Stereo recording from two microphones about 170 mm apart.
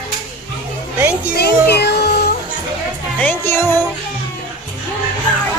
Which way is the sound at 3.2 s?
15° left (ahead or behind).